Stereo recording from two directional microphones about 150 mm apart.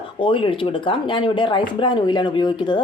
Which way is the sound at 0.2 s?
35° left (ahead or behind).